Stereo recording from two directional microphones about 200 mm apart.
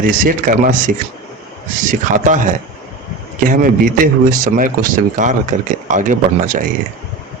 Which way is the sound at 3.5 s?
40° right (ahead or behind).